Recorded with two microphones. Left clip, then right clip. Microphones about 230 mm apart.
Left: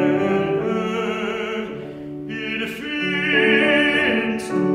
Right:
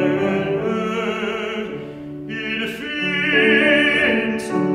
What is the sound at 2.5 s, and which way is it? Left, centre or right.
Opera, right.